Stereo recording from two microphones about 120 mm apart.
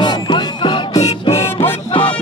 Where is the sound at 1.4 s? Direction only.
55° left (ahead or behind).